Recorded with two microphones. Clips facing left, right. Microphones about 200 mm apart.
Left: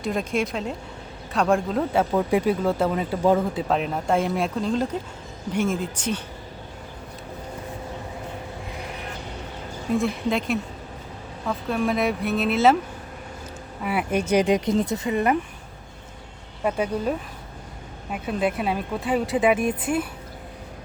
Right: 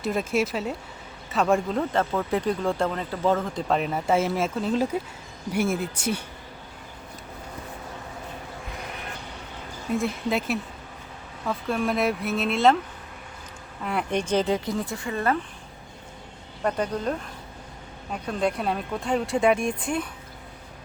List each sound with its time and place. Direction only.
0.0 s speech: centre (ahead or behind)
10.0 s speech: 5° right (ahead or behind)
13.8 s speech: 5° left (ahead or behind)
16.6 s speech: 10° left (ahead or behind)